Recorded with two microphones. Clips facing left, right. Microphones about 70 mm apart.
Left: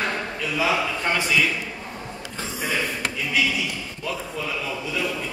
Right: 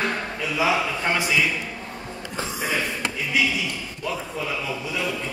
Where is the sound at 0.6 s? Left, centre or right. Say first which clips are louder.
Right 1 dB; centre.